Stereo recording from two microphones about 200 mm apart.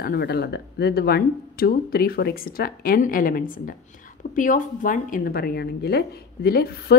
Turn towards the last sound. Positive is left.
turn(degrees=50)  # may be behind; listen again after turning